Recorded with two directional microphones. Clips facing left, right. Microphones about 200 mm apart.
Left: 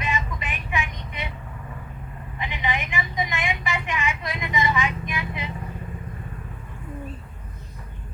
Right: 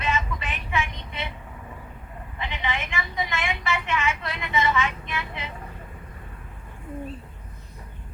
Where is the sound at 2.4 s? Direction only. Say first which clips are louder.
Left 2 dB; 15° left (ahead or behind).